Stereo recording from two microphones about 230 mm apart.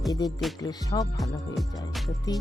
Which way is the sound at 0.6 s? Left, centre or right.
Centre.